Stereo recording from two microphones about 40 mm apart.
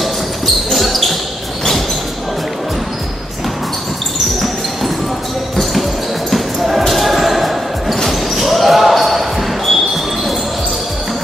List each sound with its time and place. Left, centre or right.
0.7 s basketball bounce: centre
6.3 s basketball bounce: centre